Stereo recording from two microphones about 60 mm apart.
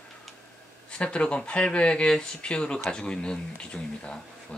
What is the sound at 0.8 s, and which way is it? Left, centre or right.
Speech, centre.